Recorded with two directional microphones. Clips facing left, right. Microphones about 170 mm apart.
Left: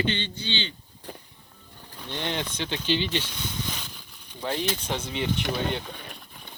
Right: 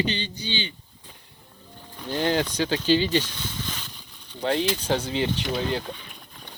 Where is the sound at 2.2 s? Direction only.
35° right (ahead or behind).